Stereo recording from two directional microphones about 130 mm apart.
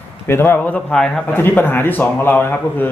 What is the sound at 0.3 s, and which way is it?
Speech, 20° left (ahead or behind).